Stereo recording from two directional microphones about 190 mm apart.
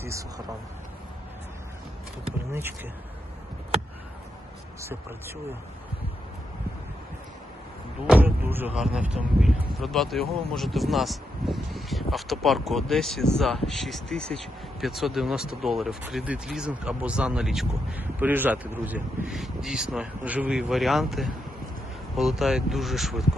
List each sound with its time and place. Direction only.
0.0 s speech: 15° right (ahead or behind)
2.5 s speech: 10° right (ahead or behind)
4.8 s speech: 15° right (ahead or behind)
8.0 s speech: 10° right (ahead or behind)